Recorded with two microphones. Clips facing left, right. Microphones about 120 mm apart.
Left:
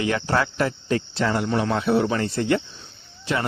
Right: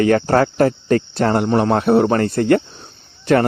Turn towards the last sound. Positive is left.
turn(degrees=-55)  # may be behind; listen again after turning